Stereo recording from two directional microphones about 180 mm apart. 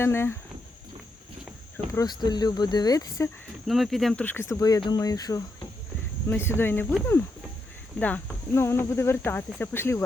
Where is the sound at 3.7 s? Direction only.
Centre (ahead or behind).